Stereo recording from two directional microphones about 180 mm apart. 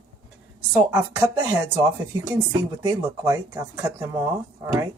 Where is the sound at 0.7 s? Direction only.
15° right (ahead or behind).